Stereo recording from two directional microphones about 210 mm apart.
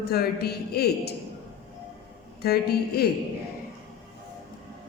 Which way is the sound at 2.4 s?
50° left (ahead or behind).